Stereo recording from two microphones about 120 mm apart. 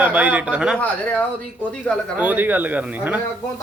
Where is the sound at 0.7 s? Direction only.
10° left (ahead or behind).